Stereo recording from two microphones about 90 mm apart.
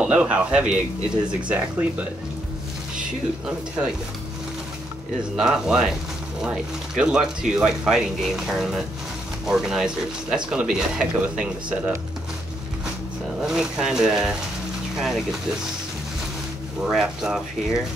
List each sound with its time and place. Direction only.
0.0 s speech: 10° right (ahead or behind)
3.4 s speech: 10° right (ahead or behind)
5.3 s speech: 5° right (ahead or behind)
13.4 s speech: 5° right (ahead or behind)
16.8 s speech: 5° right (ahead or behind)